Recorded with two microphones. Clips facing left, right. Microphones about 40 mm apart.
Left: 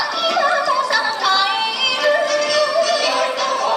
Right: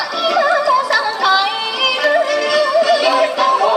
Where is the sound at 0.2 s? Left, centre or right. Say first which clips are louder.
Right 4 dB; centre.